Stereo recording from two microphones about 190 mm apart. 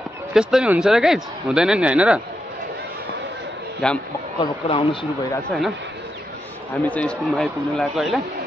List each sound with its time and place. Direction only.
0.3 s speech: 5° right (ahead or behind)
3.8 s speech: centre (ahead or behind)
4.4 s speech: 25° left (ahead or behind)
6.8 s speech: 5° left (ahead or behind)